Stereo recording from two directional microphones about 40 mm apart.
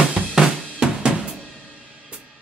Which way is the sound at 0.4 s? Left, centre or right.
Centre.